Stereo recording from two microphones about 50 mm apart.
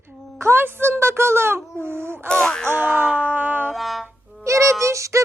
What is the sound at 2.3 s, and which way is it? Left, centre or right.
Music, centre.